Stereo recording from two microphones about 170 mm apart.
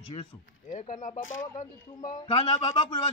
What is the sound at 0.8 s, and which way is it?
Speech, 50° left (ahead or behind).